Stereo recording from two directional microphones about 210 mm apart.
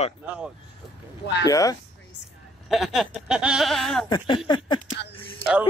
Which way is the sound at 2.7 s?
Centre (ahead or behind).